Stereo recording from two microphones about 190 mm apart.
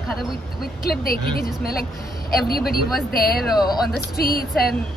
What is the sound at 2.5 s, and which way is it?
Speech, 55° left (ahead or behind).